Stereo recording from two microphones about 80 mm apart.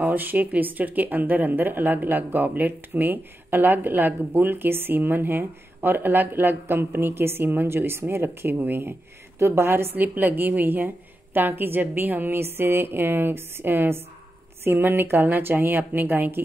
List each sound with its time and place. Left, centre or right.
0.0 s speech: right